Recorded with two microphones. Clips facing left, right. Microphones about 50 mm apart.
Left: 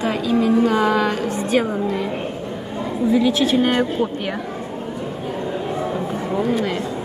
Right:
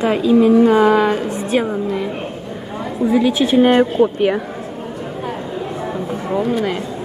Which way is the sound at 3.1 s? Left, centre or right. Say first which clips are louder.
Right 2 dB; centre.